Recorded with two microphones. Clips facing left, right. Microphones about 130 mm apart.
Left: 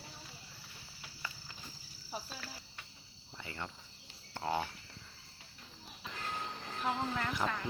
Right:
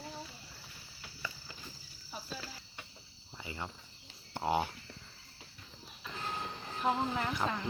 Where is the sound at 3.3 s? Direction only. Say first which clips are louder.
Right 2 dB; 10° right (ahead or behind).